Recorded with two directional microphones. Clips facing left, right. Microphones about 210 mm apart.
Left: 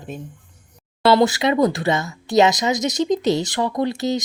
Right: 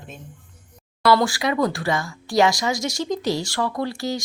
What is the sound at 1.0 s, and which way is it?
Speech, 25° left (ahead or behind).